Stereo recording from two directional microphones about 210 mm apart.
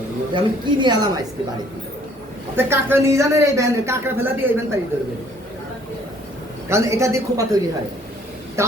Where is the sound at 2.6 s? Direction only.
10° right (ahead or behind).